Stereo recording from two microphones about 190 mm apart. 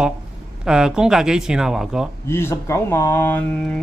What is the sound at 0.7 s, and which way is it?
Speech, 5° right (ahead or behind).